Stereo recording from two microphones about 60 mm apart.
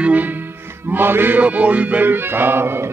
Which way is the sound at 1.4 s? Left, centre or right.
Right.